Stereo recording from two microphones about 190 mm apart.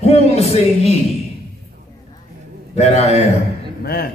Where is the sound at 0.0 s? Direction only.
35° left (ahead or behind).